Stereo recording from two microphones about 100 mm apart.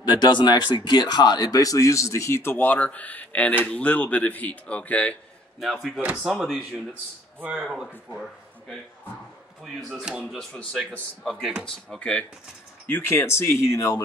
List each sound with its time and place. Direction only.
0.1 s speech: 50° left (ahead or behind); by 5.1 s 15° left (ahead or behind)
5.6 s speech: centre (ahead or behind)
7.3 s speech: 15° right (ahead or behind)
7.6 s speech: 5° right (ahead or behind)
9.6 s speech: 5° right (ahead or behind)
12.8 s speech: 20° left (ahead or behind)